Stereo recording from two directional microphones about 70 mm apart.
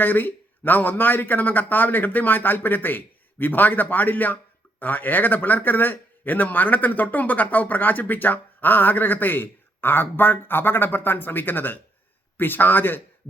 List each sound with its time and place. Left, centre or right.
0.0 s a man's voice: left